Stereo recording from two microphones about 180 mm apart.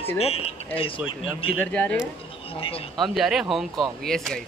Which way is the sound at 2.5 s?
30° left (ahead or behind).